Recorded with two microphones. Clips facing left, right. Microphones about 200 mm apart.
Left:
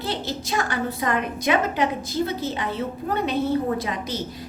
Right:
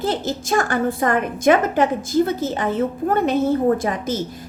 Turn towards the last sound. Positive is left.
turn(degrees=-50)  # may be behind; listen again after turning